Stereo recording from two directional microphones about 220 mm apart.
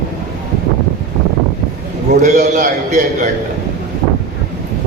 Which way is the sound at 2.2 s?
35° right (ahead or behind).